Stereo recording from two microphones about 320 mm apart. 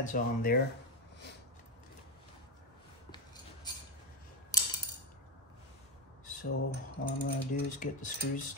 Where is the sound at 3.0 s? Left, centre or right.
Centre.